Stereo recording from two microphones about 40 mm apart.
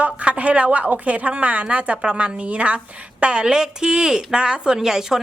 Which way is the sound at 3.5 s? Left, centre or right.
Centre.